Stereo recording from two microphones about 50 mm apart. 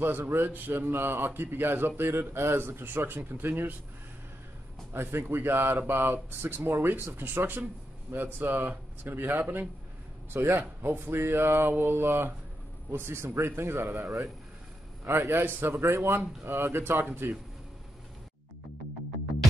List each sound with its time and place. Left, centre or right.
0.0 s speech: right
4.9 s a man's voice: right
15.0 s speech: right
15.8 s a man's voice: right
17.0 s speech: right